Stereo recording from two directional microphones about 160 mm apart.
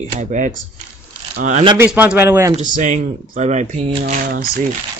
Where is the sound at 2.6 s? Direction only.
50° right (ahead or behind).